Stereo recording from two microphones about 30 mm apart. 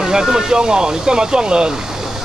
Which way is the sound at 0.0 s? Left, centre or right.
Right.